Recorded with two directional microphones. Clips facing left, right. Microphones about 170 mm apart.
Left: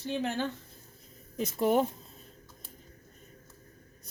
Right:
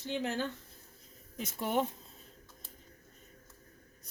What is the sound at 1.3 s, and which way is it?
Speech, 40° left (ahead or behind).